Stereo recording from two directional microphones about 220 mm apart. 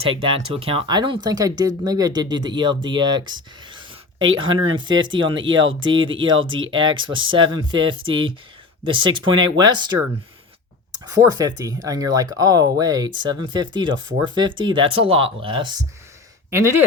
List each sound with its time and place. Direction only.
0.0 s speech: 25° right (ahead or behind)
11.0 s speech: 15° right (ahead or behind)
16.5 s speech: 10° right (ahead or behind)